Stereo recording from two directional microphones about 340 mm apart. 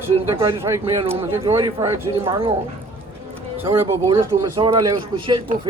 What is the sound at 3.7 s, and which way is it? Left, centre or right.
Speech, centre.